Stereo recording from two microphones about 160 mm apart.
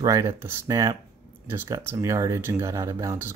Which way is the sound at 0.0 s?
20° right (ahead or behind).